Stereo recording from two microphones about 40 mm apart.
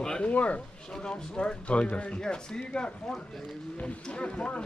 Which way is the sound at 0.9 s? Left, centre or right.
Left.